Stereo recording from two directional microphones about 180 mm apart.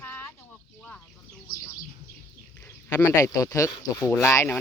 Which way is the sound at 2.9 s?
20° left (ahead or behind).